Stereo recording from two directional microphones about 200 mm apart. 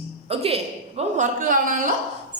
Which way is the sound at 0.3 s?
30° right (ahead or behind).